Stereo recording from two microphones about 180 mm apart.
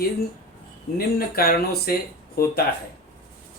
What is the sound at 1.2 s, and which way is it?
Speech, 55° left (ahead or behind).